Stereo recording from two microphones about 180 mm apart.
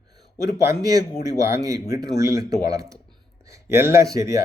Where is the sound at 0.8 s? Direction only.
20° right (ahead or behind).